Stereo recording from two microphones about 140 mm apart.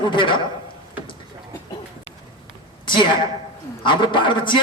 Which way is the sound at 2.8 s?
35° left (ahead or behind).